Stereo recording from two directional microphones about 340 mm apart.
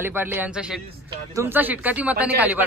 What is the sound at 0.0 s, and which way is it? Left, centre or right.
A man's voice, centre.